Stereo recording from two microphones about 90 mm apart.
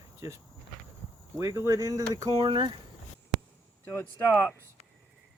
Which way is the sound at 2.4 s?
60° right (ahead or behind).